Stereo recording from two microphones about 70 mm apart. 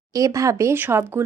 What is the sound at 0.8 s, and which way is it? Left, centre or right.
Speech, right.